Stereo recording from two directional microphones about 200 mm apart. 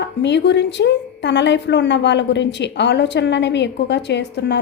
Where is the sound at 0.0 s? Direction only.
60° left (ahead or behind).